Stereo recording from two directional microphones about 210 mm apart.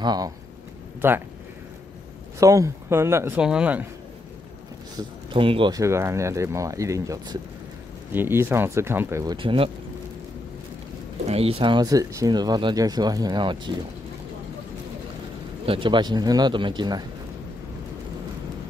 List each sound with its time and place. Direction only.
0.0 s speech: 20° right (ahead or behind)
2.4 s speech: 15° right (ahead or behind)
4.9 s speech: 25° right (ahead or behind)
11.2 s speech: 30° right (ahead or behind)
15.6 s speech: 25° right (ahead or behind)